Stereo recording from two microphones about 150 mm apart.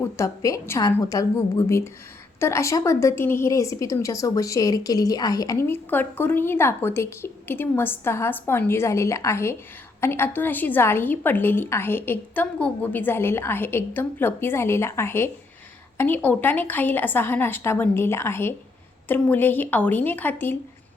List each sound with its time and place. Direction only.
0.0 s a woman's voice: 20° left (ahead or behind)